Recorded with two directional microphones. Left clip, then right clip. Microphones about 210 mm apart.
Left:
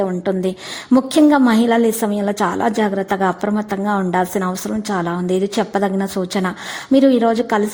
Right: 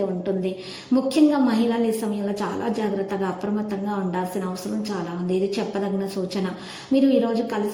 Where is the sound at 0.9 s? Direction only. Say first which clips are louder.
Left 6 dB; 45° left (ahead or behind).